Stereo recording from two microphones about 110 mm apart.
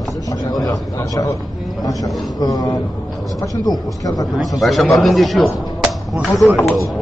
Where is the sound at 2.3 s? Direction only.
35° left (ahead or behind).